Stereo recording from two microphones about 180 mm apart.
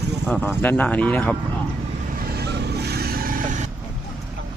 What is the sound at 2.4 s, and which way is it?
Vehicle, 65° right (ahead or behind).